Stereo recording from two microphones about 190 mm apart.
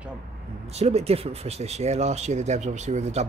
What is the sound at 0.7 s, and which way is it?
Speech, 35° right (ahead or behind).